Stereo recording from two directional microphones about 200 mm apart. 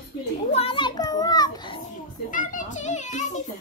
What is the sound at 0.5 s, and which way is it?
A child's voice, 25° left (ahead or behind).